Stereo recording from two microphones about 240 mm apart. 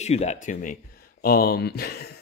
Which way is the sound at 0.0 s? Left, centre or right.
Left.